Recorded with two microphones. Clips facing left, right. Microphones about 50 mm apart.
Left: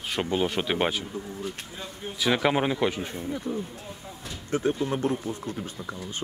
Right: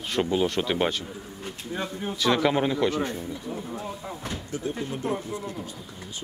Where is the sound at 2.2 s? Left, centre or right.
Centre.